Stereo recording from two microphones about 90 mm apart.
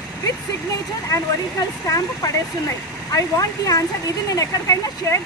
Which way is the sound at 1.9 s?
40° left (ahead or behind).